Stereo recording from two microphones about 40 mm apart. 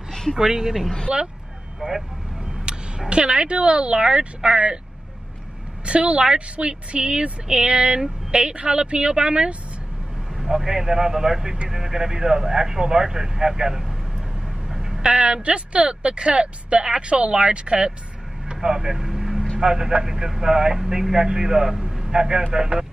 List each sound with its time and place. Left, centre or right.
0.1 s a sound: centre
0.4 s a woman's voice: centre
5.9 s a woman's voice: right
10.3 s speech: centre
14.7 s vehicle: centre
15.0 s a woman's voice: right
18.7 s vehicle: centre
19.6 s a man's voice: right